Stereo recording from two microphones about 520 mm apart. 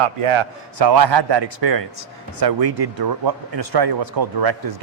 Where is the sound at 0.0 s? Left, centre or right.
Right.